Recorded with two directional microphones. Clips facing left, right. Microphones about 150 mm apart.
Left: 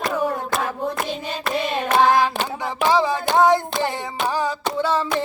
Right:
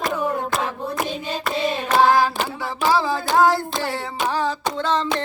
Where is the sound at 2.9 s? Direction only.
20° left (ahead or behind).